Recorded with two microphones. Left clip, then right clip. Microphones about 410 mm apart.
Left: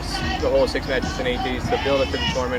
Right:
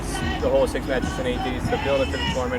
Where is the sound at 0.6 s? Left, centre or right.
Right.